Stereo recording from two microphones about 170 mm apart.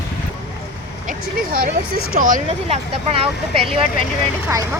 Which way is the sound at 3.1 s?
35° right (ahead or behind).